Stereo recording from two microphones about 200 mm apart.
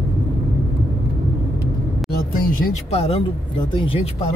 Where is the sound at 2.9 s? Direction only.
30° left (ahead or behind).